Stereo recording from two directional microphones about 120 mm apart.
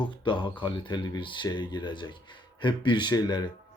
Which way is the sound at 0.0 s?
40° left (ahead or behind).